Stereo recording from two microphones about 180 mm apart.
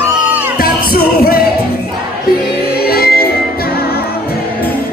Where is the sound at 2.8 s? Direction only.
60° left (ahead or behind).